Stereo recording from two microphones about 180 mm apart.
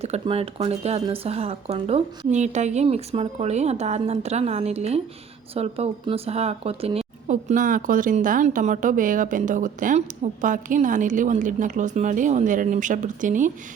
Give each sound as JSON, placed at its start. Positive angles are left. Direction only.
{"t": 0.0, "sound": "speech", "side_deg": -35}